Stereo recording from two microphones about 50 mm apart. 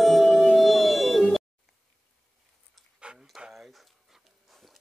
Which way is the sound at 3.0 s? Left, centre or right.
Right.